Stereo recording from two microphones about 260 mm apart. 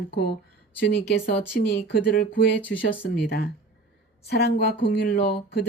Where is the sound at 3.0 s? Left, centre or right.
Left.